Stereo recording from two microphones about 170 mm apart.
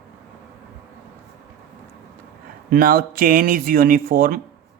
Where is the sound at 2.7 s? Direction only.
60° right (ahead or behind).